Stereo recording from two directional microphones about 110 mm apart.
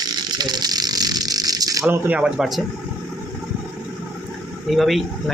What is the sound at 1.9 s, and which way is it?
Speech, 10° right (ahead or behind).